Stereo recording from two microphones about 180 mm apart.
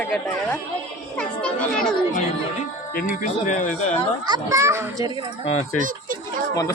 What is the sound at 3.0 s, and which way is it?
Speech, 50° left (ahead or behind).